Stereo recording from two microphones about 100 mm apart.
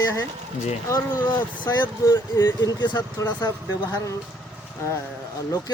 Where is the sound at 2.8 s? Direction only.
45° left (ahead or behind).